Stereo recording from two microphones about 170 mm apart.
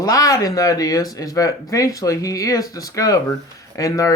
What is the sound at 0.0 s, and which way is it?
Speech, 20° left (ahead or behind).